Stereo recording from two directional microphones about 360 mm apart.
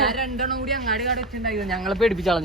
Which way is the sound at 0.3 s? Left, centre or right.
Right.